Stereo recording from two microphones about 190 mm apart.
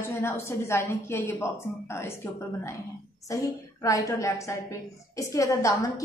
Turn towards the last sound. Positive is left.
turn(degrees=15)  # may be behind; listen again after turning